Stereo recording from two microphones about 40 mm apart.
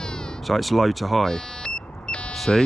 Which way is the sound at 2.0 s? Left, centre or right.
Left.